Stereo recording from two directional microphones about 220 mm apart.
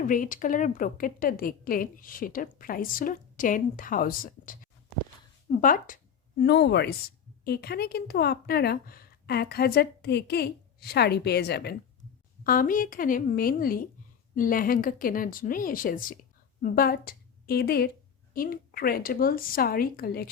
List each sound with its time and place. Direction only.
0.0 s a woman's voice: 35° left (ahead or behind)
6.4 s a woman's voice: 50° left (ahead or behind)